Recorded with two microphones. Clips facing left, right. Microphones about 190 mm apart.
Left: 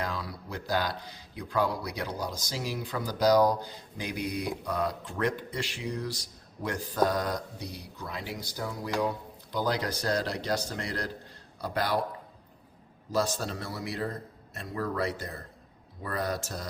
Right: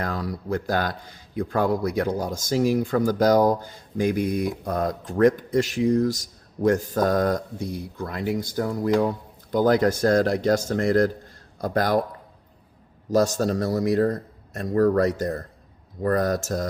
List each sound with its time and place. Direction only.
0.0 s a man's voice: 45° right (ahead or behind)
13.1 s a man's voice: 45° right (ahead or behind)